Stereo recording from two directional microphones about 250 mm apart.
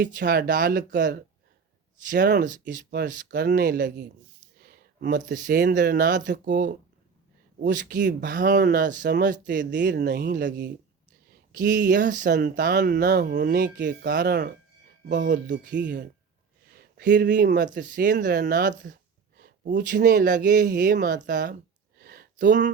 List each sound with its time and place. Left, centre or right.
0.0 s speech: right
11.5 s speech: right
17.0 s speech: right
21.9 s a sound: right